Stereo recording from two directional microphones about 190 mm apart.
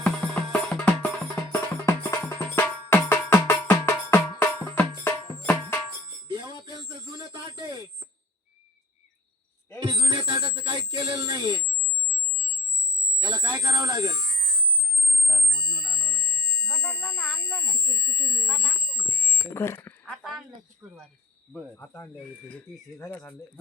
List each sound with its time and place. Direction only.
0.0 s music: 5° left (ahead or behind)
6.2 s radio: 25° right (ahead or behind)
9.8 s music: 25° right (ahead or behind)
13.2 s buzzer: 20° right (ahead or behind)
16.8 s a sound: 5° left (ahead or behind)
18.9 s alarm: 20° right (ahead or behind)
19.5 s a sound: 10° left (ahead or behind)
20.8 s cricket: centre (ahead or behind)
21.5 s speech: 10° left (ahead or behind)